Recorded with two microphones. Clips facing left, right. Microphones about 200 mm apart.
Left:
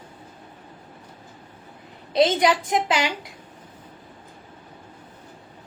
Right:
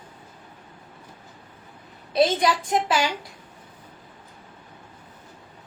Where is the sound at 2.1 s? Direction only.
20° left (ahead or behind).